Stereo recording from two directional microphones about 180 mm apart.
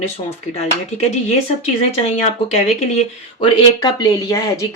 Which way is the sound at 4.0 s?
20° left (ahead or behind).